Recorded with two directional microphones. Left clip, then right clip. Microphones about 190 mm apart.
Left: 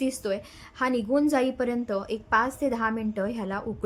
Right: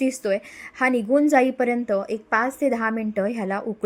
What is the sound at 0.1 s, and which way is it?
A woman's voice, 15° right (ahead or behind).